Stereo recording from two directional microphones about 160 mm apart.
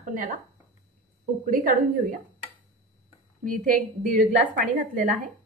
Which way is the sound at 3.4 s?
60° right (ahead or behind).